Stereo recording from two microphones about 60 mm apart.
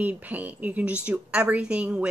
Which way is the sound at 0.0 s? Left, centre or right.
Right.